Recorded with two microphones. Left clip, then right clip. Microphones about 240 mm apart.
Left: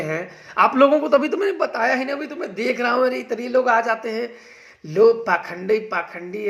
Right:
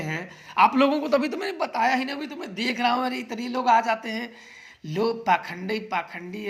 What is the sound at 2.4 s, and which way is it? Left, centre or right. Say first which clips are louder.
Speech: left 5 dB; right.